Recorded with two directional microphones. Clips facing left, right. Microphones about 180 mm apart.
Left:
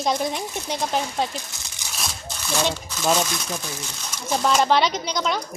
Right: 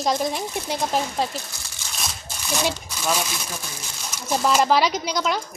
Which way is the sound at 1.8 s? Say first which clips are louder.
Left 1 dB; 15° left (ahead or behind).